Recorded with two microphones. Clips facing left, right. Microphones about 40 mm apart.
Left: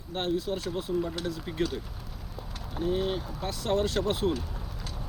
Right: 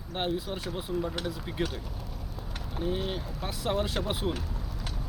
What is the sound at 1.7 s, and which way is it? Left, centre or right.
Vehicle, centre.